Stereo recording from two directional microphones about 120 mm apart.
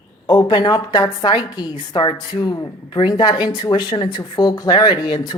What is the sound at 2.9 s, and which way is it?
A woman's voice, 40° left (ahead or behind).